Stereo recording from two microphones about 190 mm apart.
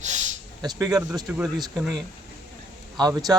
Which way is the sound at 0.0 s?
40° right (ahead or behind).